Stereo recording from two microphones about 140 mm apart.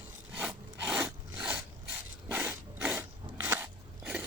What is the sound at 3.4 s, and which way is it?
Biting, 15° right (ahead or behind).